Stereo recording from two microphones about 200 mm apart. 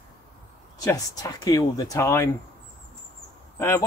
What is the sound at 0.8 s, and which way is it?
Speech, 15° left (ahead or behind).